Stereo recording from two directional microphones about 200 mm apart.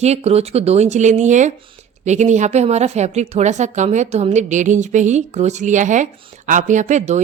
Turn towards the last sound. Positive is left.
turn(degrees=-35)  # may be behind; listen again after turning